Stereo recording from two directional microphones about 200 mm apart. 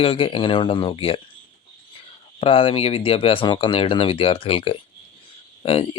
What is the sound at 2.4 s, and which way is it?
Speech, 25° left (ahead or behind).